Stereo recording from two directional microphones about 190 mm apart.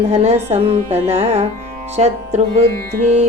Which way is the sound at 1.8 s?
35° right (ahead or behind).